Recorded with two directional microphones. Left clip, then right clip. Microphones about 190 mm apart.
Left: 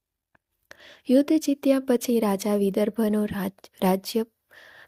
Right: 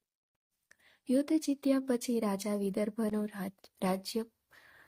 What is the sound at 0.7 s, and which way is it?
Speech, 40° left (ahead or behind).